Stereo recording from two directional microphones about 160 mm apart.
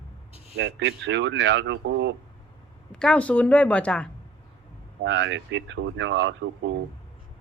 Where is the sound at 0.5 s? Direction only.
90° right.